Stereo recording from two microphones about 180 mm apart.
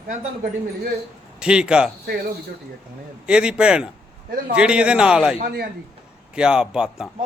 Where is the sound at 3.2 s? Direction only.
5° right (ahead or behind).